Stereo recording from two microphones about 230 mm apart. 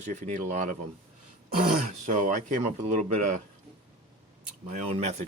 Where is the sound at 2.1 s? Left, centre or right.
Right.